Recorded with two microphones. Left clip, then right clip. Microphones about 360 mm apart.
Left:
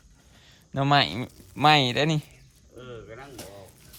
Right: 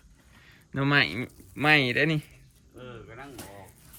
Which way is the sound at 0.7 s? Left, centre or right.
Centre.